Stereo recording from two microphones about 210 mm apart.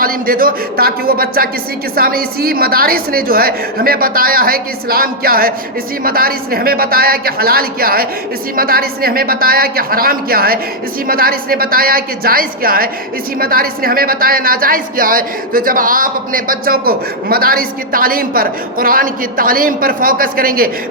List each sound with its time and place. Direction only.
0.0 s speech: 45° right (ahead or behind)